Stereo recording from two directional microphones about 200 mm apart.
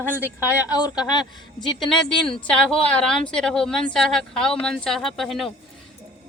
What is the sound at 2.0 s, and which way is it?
A woman's voice, 5° left (ahead or behind).